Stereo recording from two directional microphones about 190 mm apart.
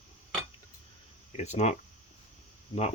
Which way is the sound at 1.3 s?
35° left (ahead or behind).